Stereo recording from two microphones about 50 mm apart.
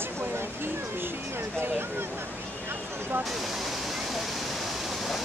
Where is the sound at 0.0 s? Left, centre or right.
Right.